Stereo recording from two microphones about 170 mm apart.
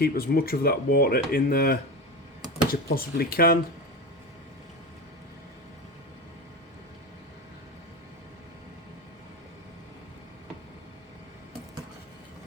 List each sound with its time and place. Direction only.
0.0 s speech: 60° left (ahead or behind)
2.9 s speech: 60° left (ahead or behind)